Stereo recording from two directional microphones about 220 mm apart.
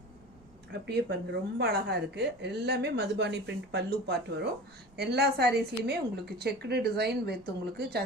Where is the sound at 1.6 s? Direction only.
45° right (ahead or behind).